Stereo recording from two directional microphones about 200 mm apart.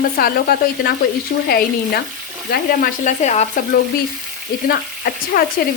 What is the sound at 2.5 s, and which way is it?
Frying, 45° left (ahead or behind).